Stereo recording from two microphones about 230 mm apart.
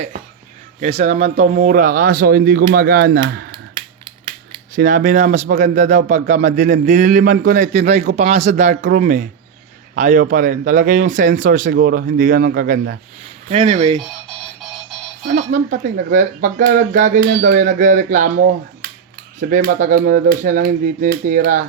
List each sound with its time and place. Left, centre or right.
0.8 s a man's voice: right
4.7 s a man's voice: right
15.3 s a man's voice: right
19.4 s a man's voice: right